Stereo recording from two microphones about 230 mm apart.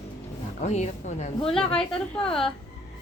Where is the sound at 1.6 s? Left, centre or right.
Centre.